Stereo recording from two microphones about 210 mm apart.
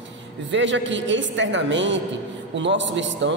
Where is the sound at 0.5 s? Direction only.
60° right (ahead or behind).